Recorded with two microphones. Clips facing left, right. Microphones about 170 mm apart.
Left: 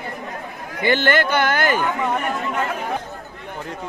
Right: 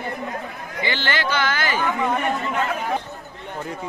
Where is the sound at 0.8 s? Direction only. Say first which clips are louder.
Left 7 dB; 55° left (ahead or behind).